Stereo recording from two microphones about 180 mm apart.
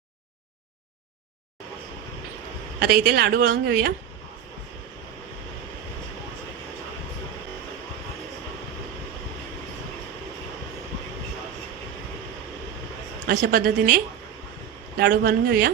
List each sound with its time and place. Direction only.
2.7 s speech: 60° right (ahead or behind)
13.2 s speech: 55° right (ahead or behind)